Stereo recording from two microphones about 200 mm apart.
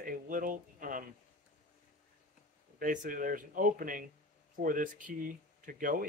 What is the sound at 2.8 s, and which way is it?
A man's voice, 40° right (ahead or behind).